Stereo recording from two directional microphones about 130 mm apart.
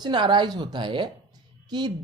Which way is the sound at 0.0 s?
35° right (ahead or behind).